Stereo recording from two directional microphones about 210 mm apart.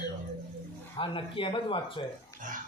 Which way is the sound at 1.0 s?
25° left (ahead or behind).